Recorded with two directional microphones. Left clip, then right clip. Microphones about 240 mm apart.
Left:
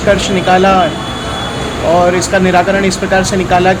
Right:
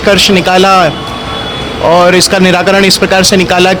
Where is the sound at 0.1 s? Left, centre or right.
Right.